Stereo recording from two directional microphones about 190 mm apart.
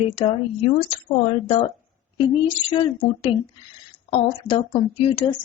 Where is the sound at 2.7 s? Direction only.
25° left (ahead or behind).